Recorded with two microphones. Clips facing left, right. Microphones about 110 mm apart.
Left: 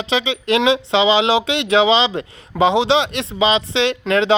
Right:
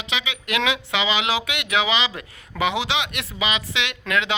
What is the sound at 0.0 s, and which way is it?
Speech, 30° left (ahead or behind).